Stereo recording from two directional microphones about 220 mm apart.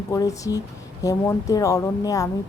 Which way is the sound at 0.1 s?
15° left (ahead or behind).